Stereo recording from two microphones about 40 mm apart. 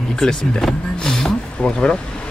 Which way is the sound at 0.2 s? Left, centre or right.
Centre.